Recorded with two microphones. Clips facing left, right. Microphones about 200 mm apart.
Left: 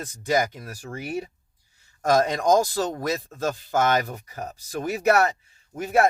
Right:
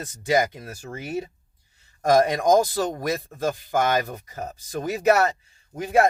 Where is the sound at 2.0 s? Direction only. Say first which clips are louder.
Right 2 dB; 15° right (ahead or behind).